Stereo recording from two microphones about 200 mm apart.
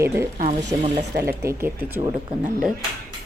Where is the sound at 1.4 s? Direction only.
15° right (ahead or behind).